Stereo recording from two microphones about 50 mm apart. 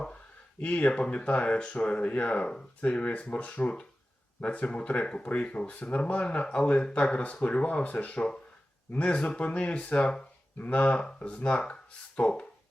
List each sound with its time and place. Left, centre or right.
0.6 s speech: left
6.2 s speech: left